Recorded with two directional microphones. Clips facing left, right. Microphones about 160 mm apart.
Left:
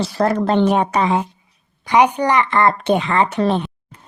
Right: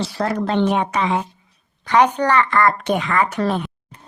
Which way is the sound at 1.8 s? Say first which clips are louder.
Left 1 dB; 10° left (ahead or behind).